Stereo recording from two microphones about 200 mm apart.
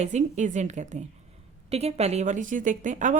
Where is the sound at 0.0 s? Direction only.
35° right (ahead or behind).